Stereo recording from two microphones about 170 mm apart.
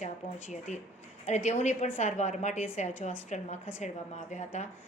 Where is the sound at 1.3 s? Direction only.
40° left (ahead or behind).